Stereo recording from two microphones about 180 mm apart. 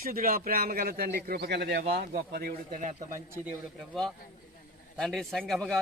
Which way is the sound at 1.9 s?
60° right (ahead or behind).